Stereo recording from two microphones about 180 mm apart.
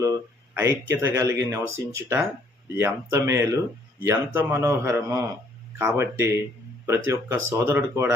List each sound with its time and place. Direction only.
0.0 s speech: 15° right (ahead or behind)